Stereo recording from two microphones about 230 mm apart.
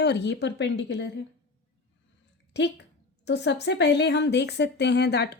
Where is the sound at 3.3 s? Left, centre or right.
Left.